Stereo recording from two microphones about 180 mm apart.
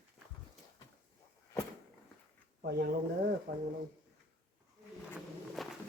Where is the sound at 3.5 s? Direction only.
55° right (ahead or behind).